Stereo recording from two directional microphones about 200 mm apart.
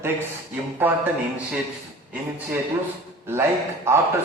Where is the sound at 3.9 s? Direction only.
15° right (ahead or behind).